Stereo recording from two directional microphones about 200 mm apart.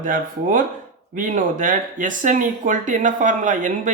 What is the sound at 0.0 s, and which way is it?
Speech, 40° right (ahead or behind).